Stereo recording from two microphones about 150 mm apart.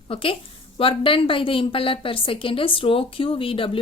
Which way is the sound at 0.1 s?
35° left (ahead or behind).